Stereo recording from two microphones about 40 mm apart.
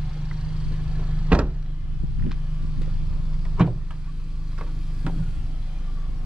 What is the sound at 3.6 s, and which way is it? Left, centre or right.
Vehicle, centre.